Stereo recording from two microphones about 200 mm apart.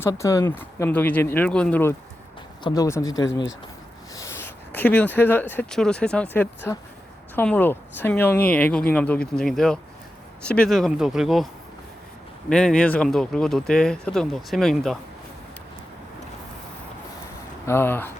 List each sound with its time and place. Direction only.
0.0 s speech: 15° left (ahead or behind)
4.1 s a sound: 15° left (ahead or behind)
4.7 s speech: 10° left (ahead or behind)
12.5 s speech: 5° left (ahead or behind)
17.7 s speech: 10° left (ahead or behind)